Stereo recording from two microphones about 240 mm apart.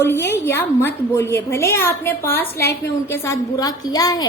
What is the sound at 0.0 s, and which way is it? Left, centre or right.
A woman's voice, centre.